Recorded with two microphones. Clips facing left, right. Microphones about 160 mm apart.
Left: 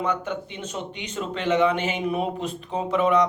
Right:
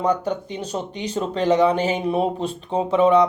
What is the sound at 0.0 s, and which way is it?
Speech, 35° right (ahead or behind).